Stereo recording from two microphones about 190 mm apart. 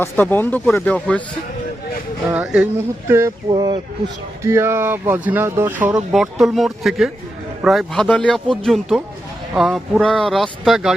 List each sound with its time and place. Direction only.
0.0 s speech: 10° left (ahead or behind)
2.3 s speech: 5° right (ahead or behind)